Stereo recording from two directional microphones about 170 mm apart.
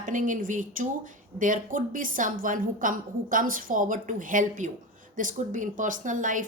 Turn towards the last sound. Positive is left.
turn(degrees=-50)  # may be behind; listen again after turning